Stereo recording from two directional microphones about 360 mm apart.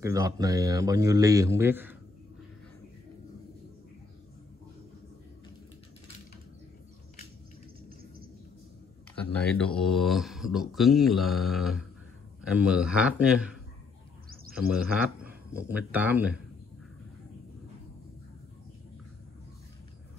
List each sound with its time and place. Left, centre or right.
0.0 s a man's voice: centre
9.3 s speech: centre
14.3 s bird: right
15.2 s speech: centre